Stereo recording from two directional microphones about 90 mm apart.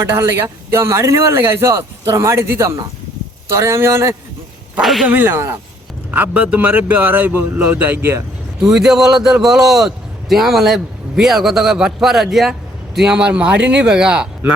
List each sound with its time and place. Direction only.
0.1 s a man's voice: 30° right (ahead or behind)
4.8 s a man's voice: centre (ahead or behind)
5.0 s a man's voice: 25° right (ahead or behind)
6.1 s a man's voice: 15° right (ahead or behind)
8.6 s a man's voice: 5° right (ahead or behind)